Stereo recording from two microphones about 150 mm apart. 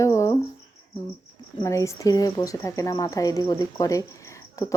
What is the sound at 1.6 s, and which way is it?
A woman's voice, 20° left (ahead or behind).